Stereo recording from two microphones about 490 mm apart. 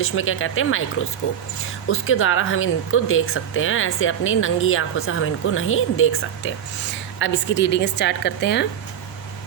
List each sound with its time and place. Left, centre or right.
0.0 s a woman's voice: left